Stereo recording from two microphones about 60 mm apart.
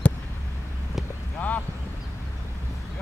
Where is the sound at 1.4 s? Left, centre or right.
Left.